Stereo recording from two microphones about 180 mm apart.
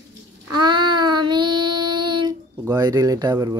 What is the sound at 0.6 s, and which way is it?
Child singing, 25° right (ahead or behind).